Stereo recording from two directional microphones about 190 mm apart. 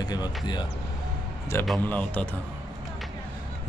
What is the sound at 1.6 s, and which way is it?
Speech, 10° left (ahead or behind).